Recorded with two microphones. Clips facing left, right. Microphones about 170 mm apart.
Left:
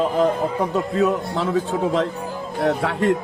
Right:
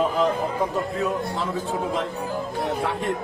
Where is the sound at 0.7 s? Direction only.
75° left (ahead or behind).